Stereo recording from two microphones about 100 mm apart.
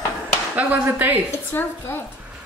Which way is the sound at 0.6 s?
20° right (ahead or behind).